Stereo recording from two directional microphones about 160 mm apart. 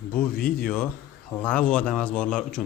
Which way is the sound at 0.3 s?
70° left (ahead or behind).